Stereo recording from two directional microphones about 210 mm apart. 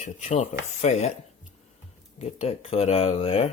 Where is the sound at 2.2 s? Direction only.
30° left (ahead or behind).